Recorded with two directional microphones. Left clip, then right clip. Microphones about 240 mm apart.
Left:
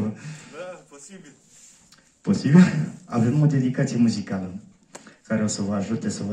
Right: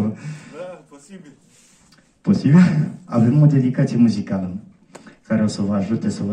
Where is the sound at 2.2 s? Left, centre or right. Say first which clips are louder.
Right 3 dB; right.